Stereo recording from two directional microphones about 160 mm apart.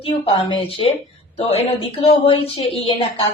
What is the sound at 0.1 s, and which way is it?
Speech, 35° left (ahead or behind).